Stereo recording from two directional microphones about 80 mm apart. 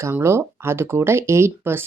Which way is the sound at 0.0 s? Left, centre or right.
Right.